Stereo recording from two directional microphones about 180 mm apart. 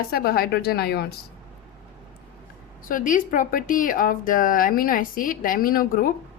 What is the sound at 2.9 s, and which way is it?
A woman's voice, 50° left (ahead or behind).